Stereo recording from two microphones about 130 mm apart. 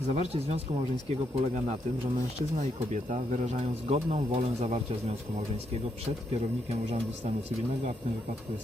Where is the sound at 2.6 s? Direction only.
80° right.